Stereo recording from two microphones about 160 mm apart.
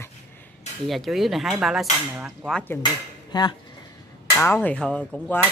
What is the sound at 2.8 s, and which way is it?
Speech, 25° left (ahead or behind).